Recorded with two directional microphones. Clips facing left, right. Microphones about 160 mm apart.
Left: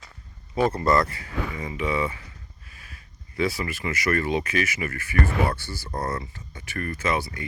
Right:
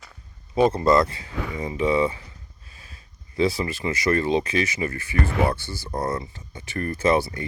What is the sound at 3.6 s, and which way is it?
Speech, 25° right (ahead or behind).